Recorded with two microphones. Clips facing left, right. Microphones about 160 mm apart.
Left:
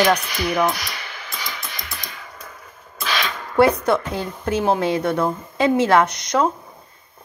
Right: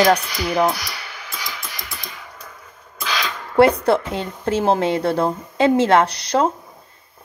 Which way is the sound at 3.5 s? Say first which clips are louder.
Right 2 dB; 30° right (ahead or behind).